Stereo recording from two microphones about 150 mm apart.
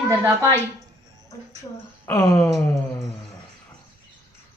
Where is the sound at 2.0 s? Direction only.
20° left (ahead or behind).